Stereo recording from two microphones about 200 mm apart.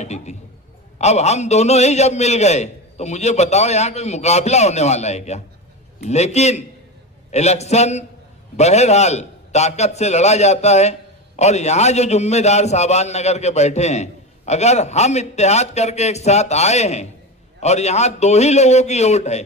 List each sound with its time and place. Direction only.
0.0 s a man's voice: 35° left (ahead or behind)